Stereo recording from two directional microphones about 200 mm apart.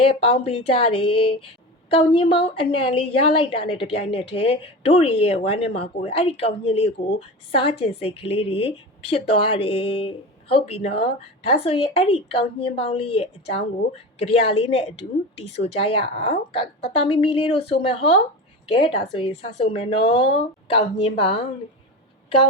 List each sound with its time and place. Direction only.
0.0 s a woman's voice: 25° left (ahead or behind)